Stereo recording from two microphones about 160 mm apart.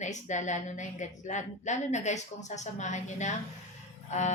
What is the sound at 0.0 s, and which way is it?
A woman's voice, 50° left (ahead or behind).